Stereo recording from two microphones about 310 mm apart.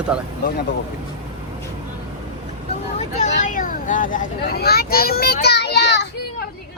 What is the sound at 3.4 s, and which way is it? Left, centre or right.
A child's voice, left.